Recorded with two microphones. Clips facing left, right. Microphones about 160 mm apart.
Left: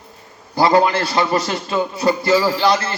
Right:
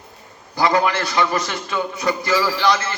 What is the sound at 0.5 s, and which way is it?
A man's voice, 30° left (ahead or behind).